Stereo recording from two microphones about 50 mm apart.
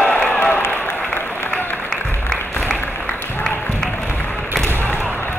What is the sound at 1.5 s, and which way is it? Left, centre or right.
Applause, centre.